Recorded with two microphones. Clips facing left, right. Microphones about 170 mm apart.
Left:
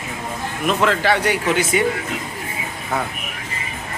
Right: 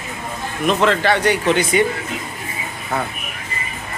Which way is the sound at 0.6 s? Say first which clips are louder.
Right 2 dB; 5° left (ahead or behind).